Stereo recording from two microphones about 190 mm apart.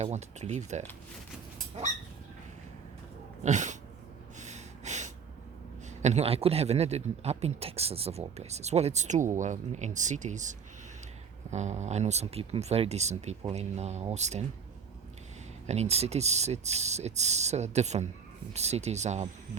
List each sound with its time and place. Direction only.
0.0 s speech: 35° right (ahead or behind)
3.4 s speech: 40° right (ahead or behind)
4.4 s snort: 35° right (ahead or behind)
6.0 s speech: 35° right (ahead or behind)
15.6 s speech: 35° right (ahead or behind)